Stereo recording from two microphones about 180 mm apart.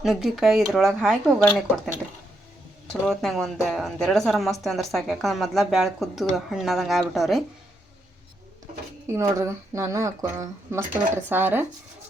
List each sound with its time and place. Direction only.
0.0 s speech: centre (ahead or behind)
2.9 s speech: centre (ahead or behind)
9.0 s speech: 15° right (ahead or behind)